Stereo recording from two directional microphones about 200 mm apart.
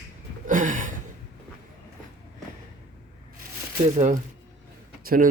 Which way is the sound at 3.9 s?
40° right (ahead or behind).